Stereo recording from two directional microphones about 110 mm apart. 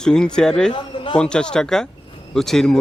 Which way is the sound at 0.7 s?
50° left (ahead or behind).